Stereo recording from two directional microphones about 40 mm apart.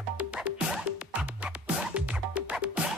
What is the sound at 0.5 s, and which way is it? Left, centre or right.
Music, right.